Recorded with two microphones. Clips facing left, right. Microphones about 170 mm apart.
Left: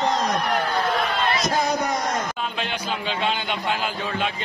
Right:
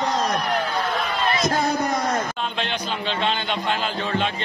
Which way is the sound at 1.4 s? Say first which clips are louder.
Right 1 dB; 55° right (ahead or behind).